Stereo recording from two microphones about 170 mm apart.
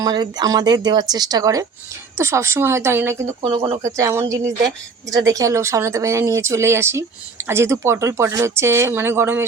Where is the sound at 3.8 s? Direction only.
20° right (ahead or behind).